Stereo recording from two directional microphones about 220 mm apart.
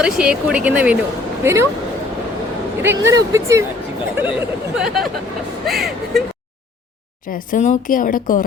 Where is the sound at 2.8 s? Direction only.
10° right (ahead or behind).